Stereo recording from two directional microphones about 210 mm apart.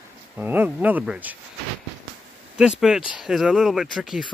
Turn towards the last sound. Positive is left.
turn(degrees=0)  # may be behind; listen again after turning